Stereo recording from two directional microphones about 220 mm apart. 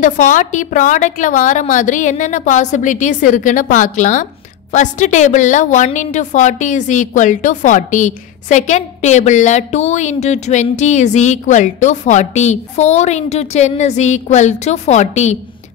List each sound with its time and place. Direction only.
0.0 s a woman's voice: 35° left (ahead or behind)